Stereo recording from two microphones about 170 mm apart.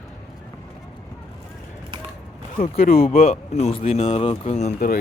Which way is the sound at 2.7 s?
60° left (ahead or behind).